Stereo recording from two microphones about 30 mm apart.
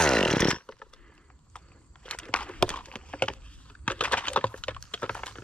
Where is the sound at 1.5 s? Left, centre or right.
Left.